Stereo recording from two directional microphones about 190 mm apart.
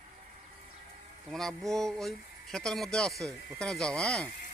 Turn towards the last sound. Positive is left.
turn(degrees=5)  # may be behind; listen again after turning